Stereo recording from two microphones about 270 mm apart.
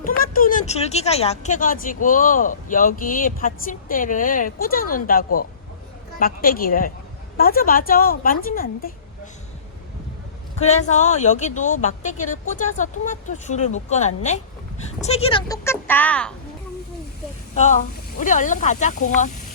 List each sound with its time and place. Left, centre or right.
0.0 s a woman's voice: left
10.6 s speech: left; by 16.3 s centre
17.5 s speech: left